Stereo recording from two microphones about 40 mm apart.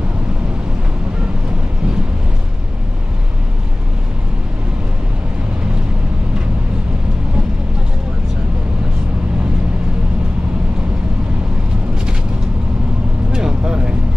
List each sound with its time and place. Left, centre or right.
13.3 s vehicle: right